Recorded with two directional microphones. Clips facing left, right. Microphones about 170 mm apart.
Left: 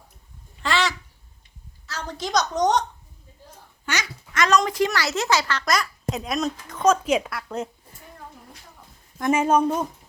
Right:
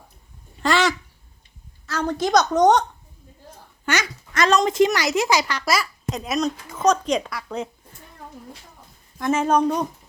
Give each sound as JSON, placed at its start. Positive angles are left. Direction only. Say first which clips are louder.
{"t": 0.6, "sound": "a sound", "louder": "right 4 dB", "side_deg": -45}
{"t": 1.9, "sound": "a woman's voice", "louder": "right 7 dB", "side_deg": -55}
{"t": 4.4, "sound": "a child's voice", "louder": "right 3 dB", "side_deg": -25}
{"t": 9.3, "sound": "speech", "louder": "even", "side_deg": 10}